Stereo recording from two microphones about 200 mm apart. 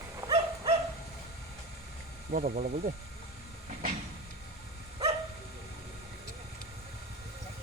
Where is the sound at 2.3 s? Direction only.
45° right (ahead or behind).